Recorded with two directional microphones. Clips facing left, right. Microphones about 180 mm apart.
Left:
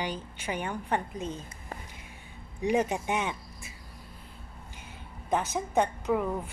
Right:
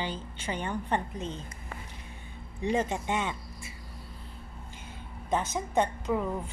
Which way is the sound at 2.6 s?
15° left (ahead or behind).